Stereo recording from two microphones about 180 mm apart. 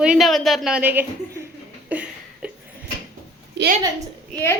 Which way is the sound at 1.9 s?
5° right (ahead or behind).